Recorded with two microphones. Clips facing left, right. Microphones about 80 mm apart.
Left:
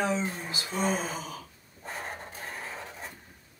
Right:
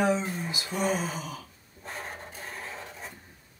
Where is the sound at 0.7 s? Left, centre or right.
Centre.